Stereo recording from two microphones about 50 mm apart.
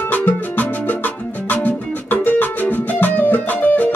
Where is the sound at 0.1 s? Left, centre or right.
Left.